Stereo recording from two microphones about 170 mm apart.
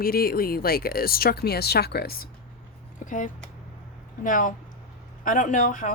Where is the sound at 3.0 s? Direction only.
50° left (ahead or behind).